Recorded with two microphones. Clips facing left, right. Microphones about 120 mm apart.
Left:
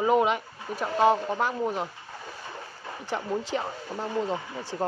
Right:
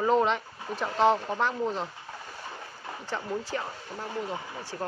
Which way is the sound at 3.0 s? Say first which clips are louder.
Left 3 dB; 20° left (ahead or behind).